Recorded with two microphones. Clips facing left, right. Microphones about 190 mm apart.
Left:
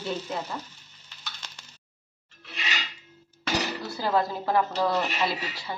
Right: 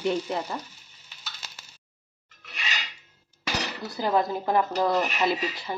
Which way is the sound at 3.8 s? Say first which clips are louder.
Right 4 dB; 20° right (ahead or behind).